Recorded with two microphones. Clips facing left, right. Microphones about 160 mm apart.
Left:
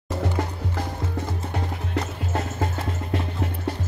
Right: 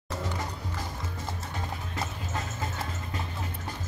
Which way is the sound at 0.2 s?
60° left (ahead or behind).